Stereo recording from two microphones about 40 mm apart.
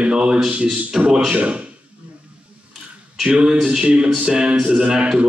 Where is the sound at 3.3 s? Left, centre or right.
Right.